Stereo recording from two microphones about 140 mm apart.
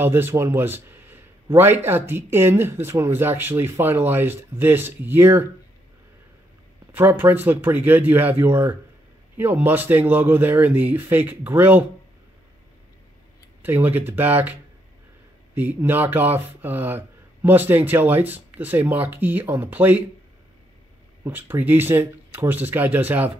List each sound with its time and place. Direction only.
0.0 s a man's voice: 15° right (ahead or behind)
6.9 s a man's voice: 15° right (ahead or behind)
13.6 s a man's voice: 15° right (ahead or behind)
21.2 s a man's voice: 15° right (ahead or behind)